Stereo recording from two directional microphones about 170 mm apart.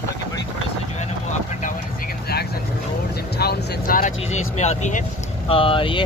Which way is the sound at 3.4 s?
60° left (ahead or behind).